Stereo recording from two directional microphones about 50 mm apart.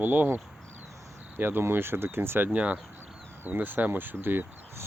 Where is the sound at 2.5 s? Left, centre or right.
Right.